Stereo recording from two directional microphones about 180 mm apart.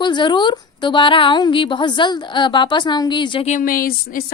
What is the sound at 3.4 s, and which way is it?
Speech, 45° left (ahead or behind).